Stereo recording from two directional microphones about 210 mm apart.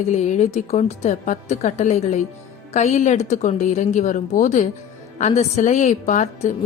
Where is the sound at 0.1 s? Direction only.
35° left (ahead or behind).